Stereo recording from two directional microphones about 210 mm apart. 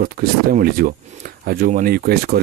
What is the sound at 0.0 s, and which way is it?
Speech, 45° right (ahead or behind).